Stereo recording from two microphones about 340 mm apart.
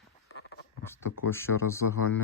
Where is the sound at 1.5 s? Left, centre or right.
Left.